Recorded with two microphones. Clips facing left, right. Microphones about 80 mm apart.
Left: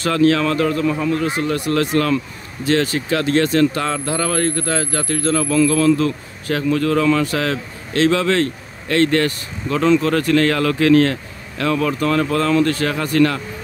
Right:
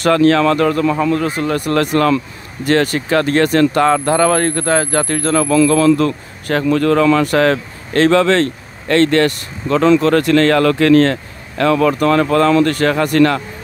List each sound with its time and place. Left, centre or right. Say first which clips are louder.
0.0 s a man's voice: right 4 dB; right
1.2 s speech: right 2 dB; right
5.7 s a man's voice: right 3 dB; right